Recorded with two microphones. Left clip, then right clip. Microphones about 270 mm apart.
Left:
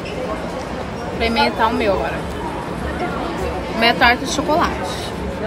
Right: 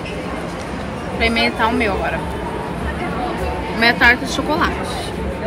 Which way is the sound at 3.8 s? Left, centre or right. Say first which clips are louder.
Right 1 dB; centre.